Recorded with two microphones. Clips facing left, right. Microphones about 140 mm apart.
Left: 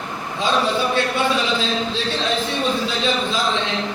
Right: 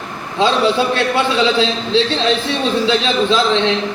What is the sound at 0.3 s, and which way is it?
A man's voice, 90° right.